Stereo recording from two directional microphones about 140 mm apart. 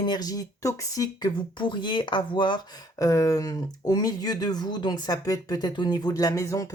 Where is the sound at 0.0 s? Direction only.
30° left (ahead or behind).